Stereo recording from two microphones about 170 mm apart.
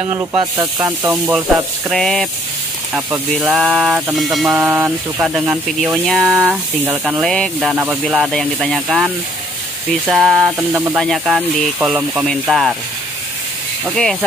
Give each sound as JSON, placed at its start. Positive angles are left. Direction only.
{"t": 0.1, "sound": "speech", "side_deg": -10}
{"t": 1.1, "sound": "speech", "side_deg": -5}
{"t": 2.9, "sound": "speech", "side_deg": -10}
{"t": 4.6, "sound": "speech", "side_deg": -10}
{"t": 7.7, "sound": "speech", "side_deg": -10}
{"t": 8.0, "sound": "speech", "side_deg": 0}
{"t": 11.0, "sound": "speech", "side_deg": 0}
{"t": 13.8, "sound": "speech", "side_deg": 0}